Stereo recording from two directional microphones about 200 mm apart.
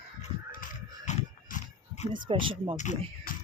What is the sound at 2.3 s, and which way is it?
Speech, 25° right (ahead or behind).